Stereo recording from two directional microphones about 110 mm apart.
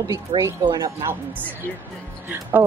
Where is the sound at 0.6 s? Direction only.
40° right (ahead or behind).